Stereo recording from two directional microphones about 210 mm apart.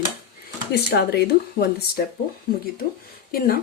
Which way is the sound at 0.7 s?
50° left (ahead or behind).